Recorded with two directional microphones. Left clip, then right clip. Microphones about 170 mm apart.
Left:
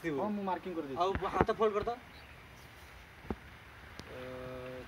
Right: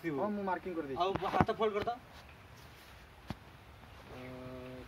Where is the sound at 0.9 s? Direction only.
45° right (ahead or behind).